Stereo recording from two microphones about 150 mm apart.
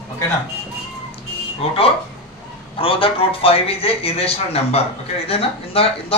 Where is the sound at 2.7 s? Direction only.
35° left (ahead or behind).